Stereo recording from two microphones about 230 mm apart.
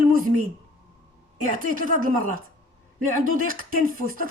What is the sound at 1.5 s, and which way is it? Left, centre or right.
Speech, right.